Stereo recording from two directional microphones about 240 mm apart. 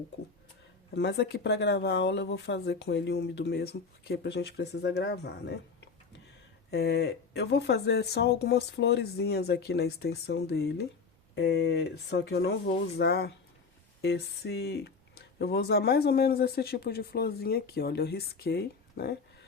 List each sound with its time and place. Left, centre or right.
0.9 s speech: left